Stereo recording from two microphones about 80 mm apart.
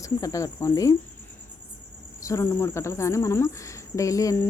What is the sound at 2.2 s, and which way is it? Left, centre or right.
A woman's voice, left.